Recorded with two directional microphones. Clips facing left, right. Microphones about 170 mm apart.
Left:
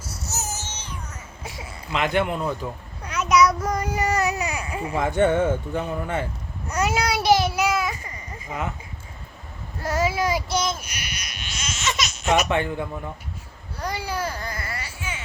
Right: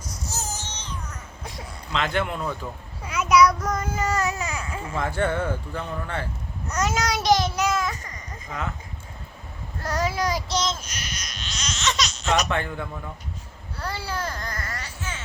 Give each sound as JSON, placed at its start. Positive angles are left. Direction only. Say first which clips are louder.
{"t": 0.0, "sound": "a sound", "louder": "left 1 dB", "side_deg": 10}
{"t": 2.2, "sound": "a man's voice", "louder": "left 3 dB", "side_deg": 10}
{"t": 3.0, "sound": "speech", "louder": "right 1 dB", "side_deg": -5}
{"t": 6.7, "sound": "a sound", "louder": "left 2 dB", "side_deg": 10}
{"t": 9.8, "sound": "speech", "louder": "left 2 dB", "side_deg": 5}
{"t": 13.7, "sound": "baby cry", "louder": "left 2 dB", "side_deg": 15}